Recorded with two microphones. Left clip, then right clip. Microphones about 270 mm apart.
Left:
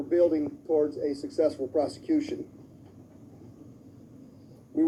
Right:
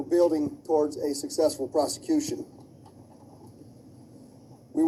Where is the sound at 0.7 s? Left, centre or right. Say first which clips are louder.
Right 1 dB; right.